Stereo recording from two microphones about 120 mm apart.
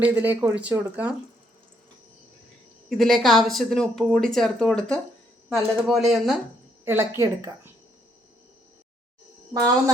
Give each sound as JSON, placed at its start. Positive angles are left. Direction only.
{"t": 0.0, "sound": "speech", "side_deg": -15}
{"t": 3.0, "sound": "speech", "side_deg": 0}
{"t": 6.8, "sound": "a woman's voice", "side_deg": -20}
{"t": 9.5, "sound": "speech", "side_deg": -30}